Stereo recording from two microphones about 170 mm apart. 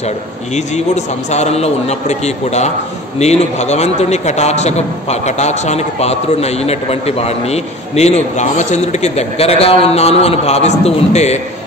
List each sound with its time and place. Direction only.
0.6 s a man's voice: 40° left (ahead or behind)